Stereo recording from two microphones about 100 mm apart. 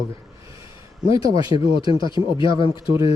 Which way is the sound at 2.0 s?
55° left (ahead or behind).